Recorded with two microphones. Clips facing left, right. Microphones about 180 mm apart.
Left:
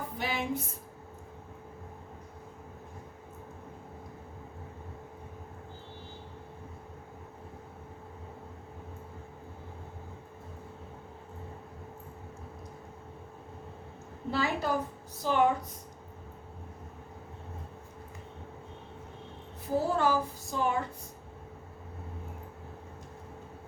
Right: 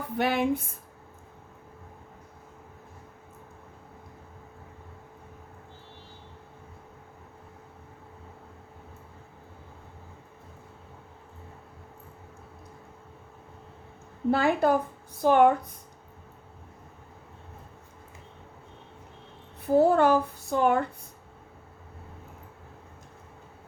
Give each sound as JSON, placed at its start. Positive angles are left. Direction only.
{"t": 0.2, "sound": "speech", "side_deg": -60}
{"t": 14.3, "sound": "speech", "side_deg": -55}
{"t": 19.6, "sound": "speech", "side_deg": -60}